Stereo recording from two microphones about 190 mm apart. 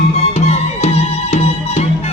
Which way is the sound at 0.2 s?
35° left (ahead or behind).